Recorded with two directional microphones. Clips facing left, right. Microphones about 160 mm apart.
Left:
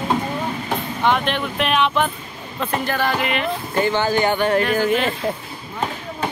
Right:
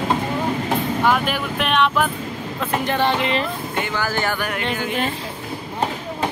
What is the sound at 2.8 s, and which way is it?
Music, 25° right (ahead or behind).